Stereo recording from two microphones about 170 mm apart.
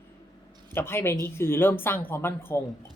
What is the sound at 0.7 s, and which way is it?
Speech, 15° left (ahead or behind).